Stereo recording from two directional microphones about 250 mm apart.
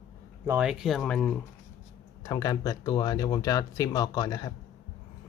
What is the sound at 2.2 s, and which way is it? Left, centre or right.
Speech, centre.